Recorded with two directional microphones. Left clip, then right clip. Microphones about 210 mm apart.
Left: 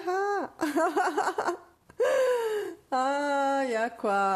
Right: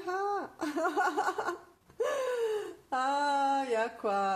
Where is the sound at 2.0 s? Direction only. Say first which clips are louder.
Left 7 dB; 45° left (ahead or behind).